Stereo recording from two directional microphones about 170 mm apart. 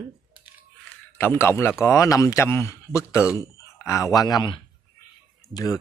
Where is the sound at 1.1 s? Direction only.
15° left (ahead or behind).